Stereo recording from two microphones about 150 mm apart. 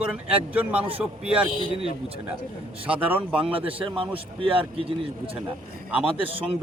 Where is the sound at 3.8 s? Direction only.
35° right (ahead or behind).